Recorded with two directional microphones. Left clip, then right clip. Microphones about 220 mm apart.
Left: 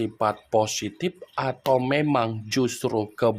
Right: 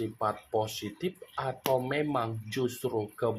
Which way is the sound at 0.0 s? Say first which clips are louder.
Left 7 dB; 45° left (ahead or behind).